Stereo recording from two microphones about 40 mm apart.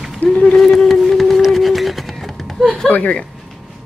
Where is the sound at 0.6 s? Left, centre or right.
Centre.